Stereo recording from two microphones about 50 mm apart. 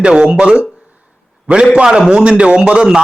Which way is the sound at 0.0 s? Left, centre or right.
Centre.